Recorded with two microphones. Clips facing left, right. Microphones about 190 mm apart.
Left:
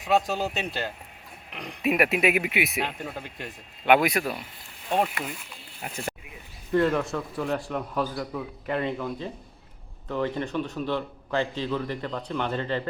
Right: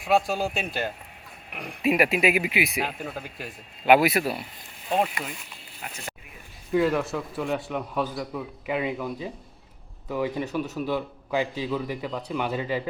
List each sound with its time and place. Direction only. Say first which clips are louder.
0.3 s a man's voice: right 1 dB; 10° right (ahead or behind)
1.8 s a man's voice: right 1 dB; centre (ahead or behind)
5.8 s speech: left 2 dB; 35° left (ahead or behind)
6.7 s a man's voice: even; 5° right (ahead or behind)